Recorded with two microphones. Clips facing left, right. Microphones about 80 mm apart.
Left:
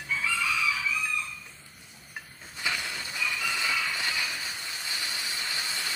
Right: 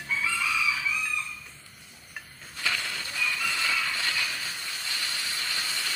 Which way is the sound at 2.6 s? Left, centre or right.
Centre.